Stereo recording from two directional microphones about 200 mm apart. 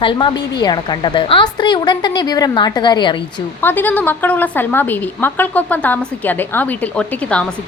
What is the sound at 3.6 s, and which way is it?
A woman's voice, 10° left (ahead or behind).